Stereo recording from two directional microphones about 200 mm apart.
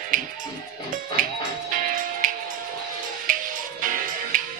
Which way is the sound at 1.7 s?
40° right (ahead or behind).